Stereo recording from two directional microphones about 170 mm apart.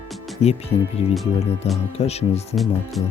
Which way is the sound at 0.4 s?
40° left (ahead or behind).